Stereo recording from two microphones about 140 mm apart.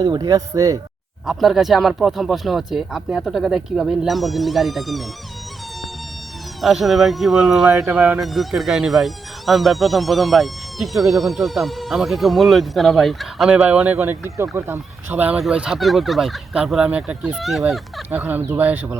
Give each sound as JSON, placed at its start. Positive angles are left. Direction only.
{"t": 0.0, "sound": "speech", "side_deg": -30}
{"t": 1.3, "sound": "speech", "side_deg": 0}
{"t": 6.6, "sound": "speech", "side_deg": 0}
{"t": 7.9, "sound": "speech", "side_deg": -10}
{"t": 8.2, "sound": "speech", "side_deg": 0}